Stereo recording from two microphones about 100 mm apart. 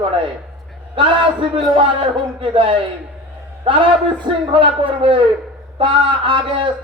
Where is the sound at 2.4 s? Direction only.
60° right (ahead or behind).